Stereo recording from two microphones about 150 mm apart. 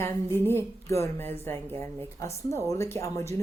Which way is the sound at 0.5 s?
15° left (ahead or behind).